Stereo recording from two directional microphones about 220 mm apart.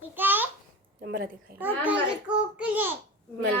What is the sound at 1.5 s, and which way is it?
A child's voice, 5° right (ahead or behind).